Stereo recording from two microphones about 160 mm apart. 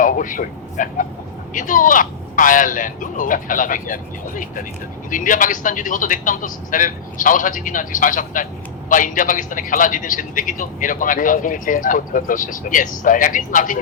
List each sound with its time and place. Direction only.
0.0 s a man's voice: 55° left (ahead or behind)